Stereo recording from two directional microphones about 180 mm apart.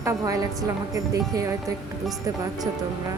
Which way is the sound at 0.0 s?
15° right (ahead or behind).